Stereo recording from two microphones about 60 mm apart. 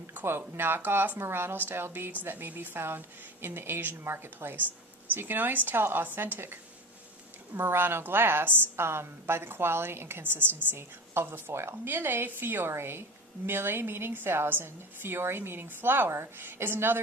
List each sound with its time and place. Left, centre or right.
0.1 s a woman's voice: right